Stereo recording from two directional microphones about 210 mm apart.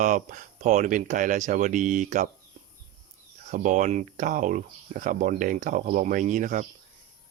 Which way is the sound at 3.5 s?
35° right (ahead or behind).